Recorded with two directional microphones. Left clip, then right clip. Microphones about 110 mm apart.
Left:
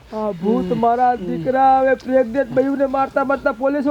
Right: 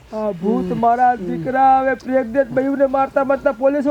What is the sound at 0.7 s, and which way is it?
Speech, 35° right (ahead or behind).